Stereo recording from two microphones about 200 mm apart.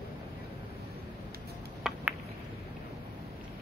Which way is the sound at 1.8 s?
5° right (ahead or behind).